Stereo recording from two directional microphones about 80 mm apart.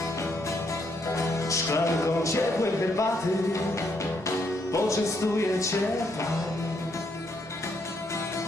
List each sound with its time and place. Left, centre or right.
1.0 s music: left
4.7 s music: left